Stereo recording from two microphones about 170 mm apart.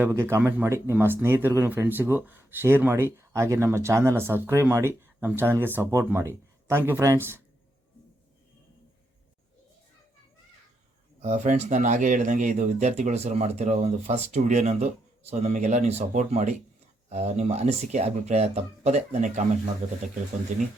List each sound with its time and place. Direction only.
0.0 s speech: 15° right (ahead or behind)
11.2 s speech: 45° right (ahead or behind)